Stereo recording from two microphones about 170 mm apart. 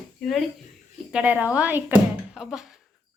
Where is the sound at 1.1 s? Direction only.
10° right (ahead or behind).